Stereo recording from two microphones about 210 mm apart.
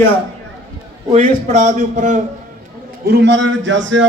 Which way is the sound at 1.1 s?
35° right (ahead or behind).